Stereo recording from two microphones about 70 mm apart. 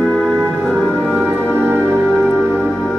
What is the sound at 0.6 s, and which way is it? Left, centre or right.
Music, centre.